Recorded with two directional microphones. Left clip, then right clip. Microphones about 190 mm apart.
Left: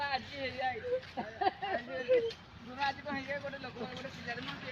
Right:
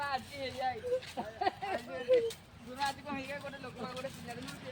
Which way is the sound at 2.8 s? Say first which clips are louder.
Left 1 dB; 5° left (ahead or behind).